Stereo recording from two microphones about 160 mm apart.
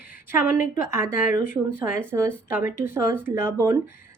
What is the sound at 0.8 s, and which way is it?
A woman's voice, 15° right (ahead or behind).